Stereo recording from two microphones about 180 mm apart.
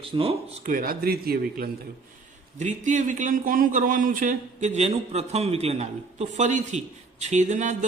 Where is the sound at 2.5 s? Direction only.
45° right (ahead or behind).